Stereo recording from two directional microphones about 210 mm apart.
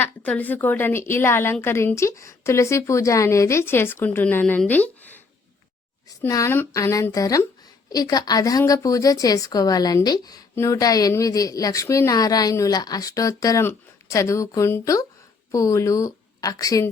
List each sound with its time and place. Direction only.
0.0 s a woman's voice: 5° left (ahead or behind)